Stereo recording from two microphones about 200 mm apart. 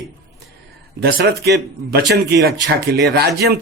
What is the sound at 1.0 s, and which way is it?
Speech, 50° right (ahead or behind).